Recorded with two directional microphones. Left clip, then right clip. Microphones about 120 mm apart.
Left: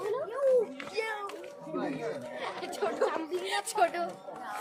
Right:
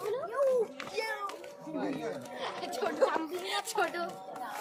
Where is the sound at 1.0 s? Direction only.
20° left (ahead or behind).